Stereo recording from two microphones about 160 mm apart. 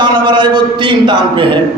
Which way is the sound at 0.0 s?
30° right (ahead or behind).